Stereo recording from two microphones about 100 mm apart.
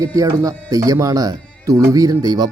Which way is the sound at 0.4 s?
35° right (ahead or behind).